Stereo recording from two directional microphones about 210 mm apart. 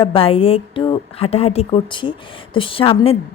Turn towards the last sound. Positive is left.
turn(degrees=25)  # may be behind; listen again after turning